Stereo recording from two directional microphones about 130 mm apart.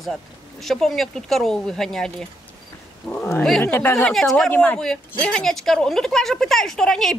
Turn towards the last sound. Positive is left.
turn(degrees=5)  # may be behind; listen again after turning